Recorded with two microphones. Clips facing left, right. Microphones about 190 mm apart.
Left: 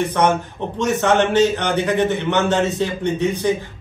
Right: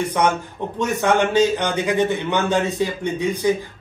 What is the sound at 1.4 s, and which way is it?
Speech, 65° left (ahead or behind).